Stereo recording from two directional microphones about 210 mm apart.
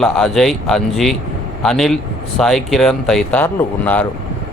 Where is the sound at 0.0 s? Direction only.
Centre (ahead or behind).